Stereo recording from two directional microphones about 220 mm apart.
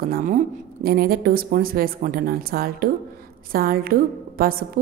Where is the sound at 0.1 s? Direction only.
35° right (ahead or behind).